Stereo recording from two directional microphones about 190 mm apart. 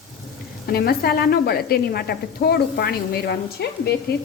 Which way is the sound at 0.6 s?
55° left (ahead or behind).